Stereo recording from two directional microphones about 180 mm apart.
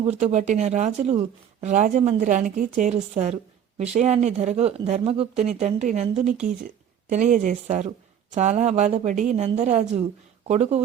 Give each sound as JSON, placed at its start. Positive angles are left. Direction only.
{"t": 0.0, "sound": "a woman's voice", "side_deg": -35}